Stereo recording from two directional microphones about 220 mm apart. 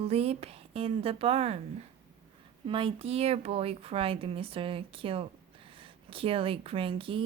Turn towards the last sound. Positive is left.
turn(degrees=-25)  # may be behind; listen again after turning